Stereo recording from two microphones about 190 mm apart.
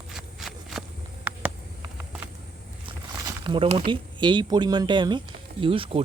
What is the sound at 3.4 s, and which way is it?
Speech, 30° right (ahead or behind).